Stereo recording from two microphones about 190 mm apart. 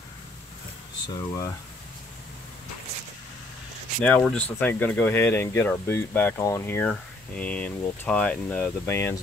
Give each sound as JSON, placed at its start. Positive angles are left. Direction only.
{"t": 1.0, "sound": "speech", "side_deg": 20}
{"t": 4.0, "sound": "speech", "side_deg": 5}